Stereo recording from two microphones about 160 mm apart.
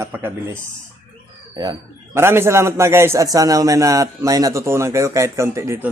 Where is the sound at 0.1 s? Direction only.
15° right (ahead or behind).